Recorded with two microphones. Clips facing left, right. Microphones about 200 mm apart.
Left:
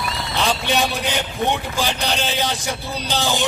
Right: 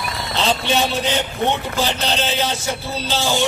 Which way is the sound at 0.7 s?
15° left (ahead or behind).